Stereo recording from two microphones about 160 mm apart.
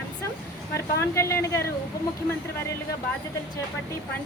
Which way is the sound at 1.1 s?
20° left (ahead or behind).